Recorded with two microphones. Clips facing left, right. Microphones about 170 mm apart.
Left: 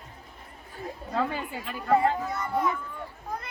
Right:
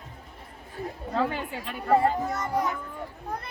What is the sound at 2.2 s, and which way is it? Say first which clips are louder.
Speech: right 1 dB; 45° right (ahead or behind).